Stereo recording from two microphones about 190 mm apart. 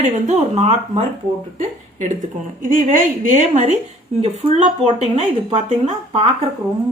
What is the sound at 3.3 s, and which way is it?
Speech, 40° right (ahead or behind).